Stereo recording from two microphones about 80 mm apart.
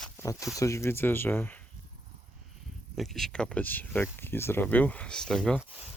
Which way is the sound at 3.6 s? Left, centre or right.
Left.